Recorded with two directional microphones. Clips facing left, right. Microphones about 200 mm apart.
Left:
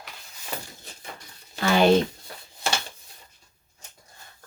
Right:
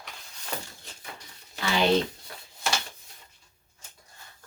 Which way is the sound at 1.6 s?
50° left (ahead or behind).